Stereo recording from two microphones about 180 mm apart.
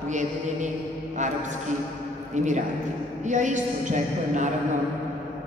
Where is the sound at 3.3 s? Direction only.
40° right (ahead or behind).